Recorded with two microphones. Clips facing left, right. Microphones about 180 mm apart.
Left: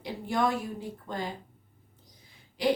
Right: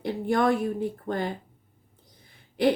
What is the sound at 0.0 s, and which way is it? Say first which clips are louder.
A woman's voice: right 5 dB; 55° right (ahead or behind).